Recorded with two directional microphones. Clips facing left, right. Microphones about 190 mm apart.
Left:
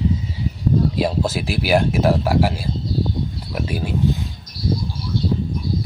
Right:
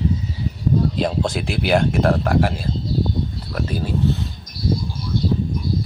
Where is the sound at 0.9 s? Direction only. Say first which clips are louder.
Left 1 dB; 5° left (ahead or behind).